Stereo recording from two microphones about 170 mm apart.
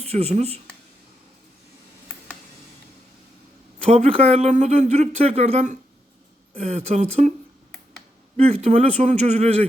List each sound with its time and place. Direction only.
0.0 s speech: 35° right (ahead or behind)
3.8 s speech: 40° right (ahead or behind)
8.6 s speech: 40° right (ahead or behind)